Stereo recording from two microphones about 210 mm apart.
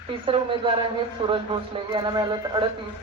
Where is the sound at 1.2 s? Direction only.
25° right (ahead or behind).